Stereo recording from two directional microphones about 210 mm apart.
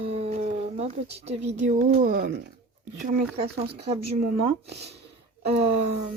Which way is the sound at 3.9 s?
30° right (ahead or behind).